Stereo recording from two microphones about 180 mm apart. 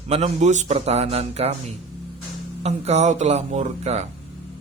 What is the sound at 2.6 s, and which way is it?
Speech, 35° right (ahead or behind).